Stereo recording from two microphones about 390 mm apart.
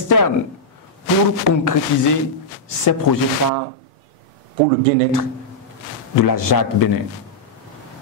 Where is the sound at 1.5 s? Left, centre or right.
Left.